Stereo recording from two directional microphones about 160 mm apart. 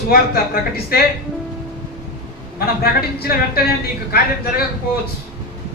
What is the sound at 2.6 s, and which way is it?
A man's voice, 75° left (ahead or behind).